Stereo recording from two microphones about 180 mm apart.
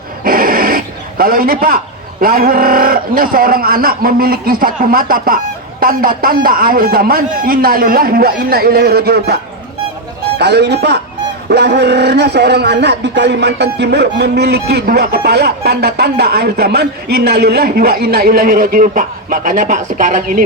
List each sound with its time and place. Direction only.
0.3 s dog: 50° right (ahead or behind)
2.2 s a man's voice: 55° right (ahead or behind)